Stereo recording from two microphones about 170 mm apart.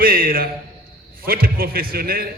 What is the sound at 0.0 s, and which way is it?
A man's voice, 60° right (ahead or behind).